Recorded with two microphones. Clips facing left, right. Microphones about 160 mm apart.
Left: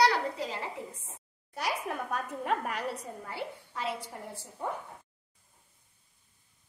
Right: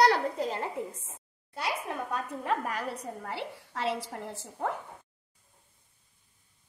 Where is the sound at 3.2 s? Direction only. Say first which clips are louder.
Right 1 dB; 80° right.